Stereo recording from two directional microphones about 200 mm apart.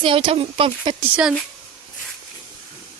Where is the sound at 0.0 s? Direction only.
25° right (ahead or behind).